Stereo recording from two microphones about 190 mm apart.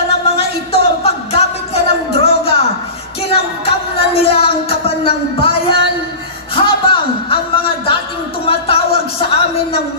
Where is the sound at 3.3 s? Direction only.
30° left (ahead or behind).